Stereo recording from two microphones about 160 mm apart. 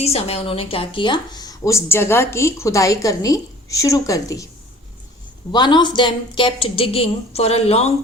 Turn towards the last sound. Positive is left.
turn(degrees=40)  # may be behind; listen again after turning